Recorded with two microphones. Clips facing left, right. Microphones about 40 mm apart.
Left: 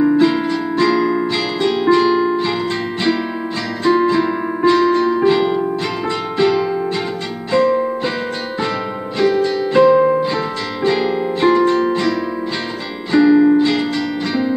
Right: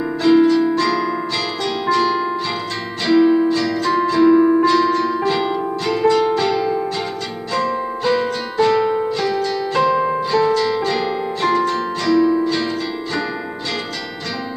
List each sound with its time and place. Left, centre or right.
0.1 s music: centre
7.5 s music: left